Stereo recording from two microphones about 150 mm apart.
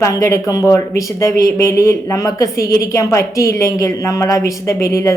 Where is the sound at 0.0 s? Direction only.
20° left (ahead or behind).